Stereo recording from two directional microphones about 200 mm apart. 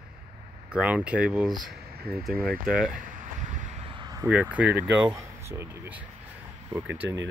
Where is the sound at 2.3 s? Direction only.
50° right (ahead or behind).